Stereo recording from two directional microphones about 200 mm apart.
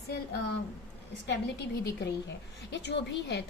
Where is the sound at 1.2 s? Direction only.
55° left (ahead or behind).